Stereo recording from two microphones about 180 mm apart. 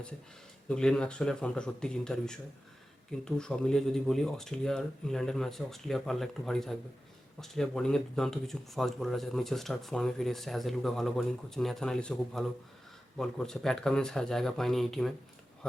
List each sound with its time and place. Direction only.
0.7 s speech: 5° left (ahead or behind)